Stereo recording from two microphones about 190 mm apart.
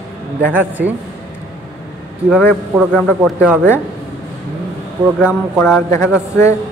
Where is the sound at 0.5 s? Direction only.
10° right (ahead or behind).